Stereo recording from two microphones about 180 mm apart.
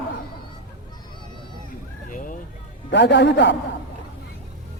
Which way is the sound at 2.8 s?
75° left (ahead or behind).